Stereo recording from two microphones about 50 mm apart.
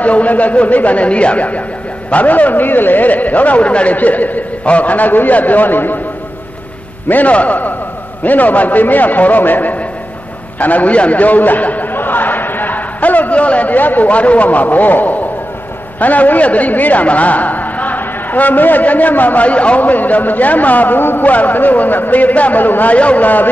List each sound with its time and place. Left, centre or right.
0.0 s speech: left
7.1 s speech: left